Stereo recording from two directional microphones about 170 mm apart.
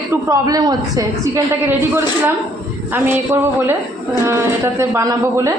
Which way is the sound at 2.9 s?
15° right (ahead or behind).